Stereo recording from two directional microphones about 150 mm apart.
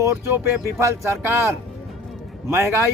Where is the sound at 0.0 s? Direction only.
20° right (ahead or behind).